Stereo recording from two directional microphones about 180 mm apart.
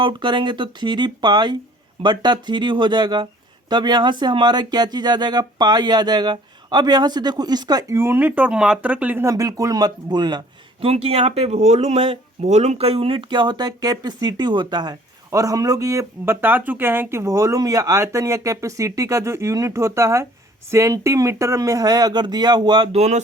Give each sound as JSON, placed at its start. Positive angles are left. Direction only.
{"t": 0.0, "sound": "speech", "side_deg": -25}